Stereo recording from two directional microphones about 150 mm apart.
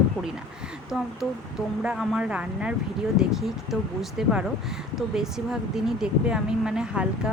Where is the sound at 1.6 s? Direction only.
5° right (ahead or behind).